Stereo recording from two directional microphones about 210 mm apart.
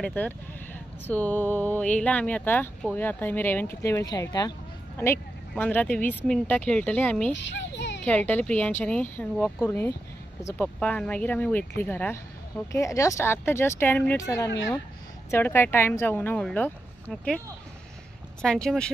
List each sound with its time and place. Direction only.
0.0 s speech: 10° left (ahead or behind)
7.3 s a sound: 60° left (ahead or behind)
8.0 s speech: 5° left (ahead or behind)
18.4 s speech: 5° left (ahead or behind)